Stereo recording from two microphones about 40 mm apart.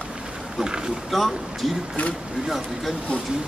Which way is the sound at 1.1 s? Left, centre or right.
Centre.